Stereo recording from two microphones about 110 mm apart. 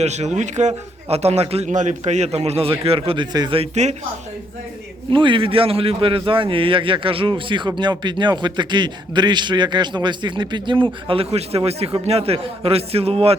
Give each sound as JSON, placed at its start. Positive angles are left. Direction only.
{"t": 0.0, "sound": "a man's voice", "side_deg": -90}
{"t": 2.8, "sound": "a man's voice", "side_deg": -60}
{"t": 3.5, "sound": "speech", "side_deg": -75}
{"t": 5.1, "sound": "a man's voice", "side_deg": -50}